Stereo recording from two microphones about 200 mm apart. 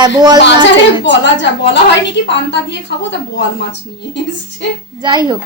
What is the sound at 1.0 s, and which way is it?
A woman's voice, 60° left (ahead or behind).